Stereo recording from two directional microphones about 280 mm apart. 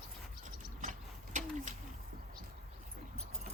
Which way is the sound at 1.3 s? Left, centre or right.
Right.